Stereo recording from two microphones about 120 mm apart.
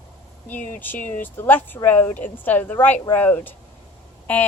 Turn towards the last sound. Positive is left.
turn(degrees=15)  # may be behind; listen again after turning